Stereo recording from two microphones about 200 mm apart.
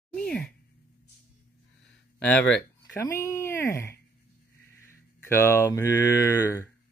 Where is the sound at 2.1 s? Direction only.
5° left (ahead or behind).